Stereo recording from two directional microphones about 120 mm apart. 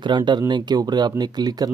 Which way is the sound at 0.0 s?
40° right (ahead or behind).